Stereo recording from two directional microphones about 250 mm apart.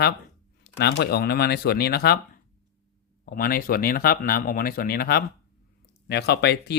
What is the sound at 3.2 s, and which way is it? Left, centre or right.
Speech, left.